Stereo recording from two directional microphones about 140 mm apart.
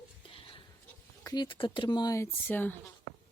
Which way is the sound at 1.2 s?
30° left (ahead or behind).